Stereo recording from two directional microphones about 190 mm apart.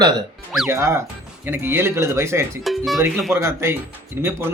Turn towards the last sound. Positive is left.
turn(degrees=-10)  # may be behind; listen again after turning